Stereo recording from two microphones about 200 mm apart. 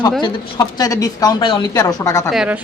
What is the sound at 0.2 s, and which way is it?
Speech, 20° left (ahead or behind).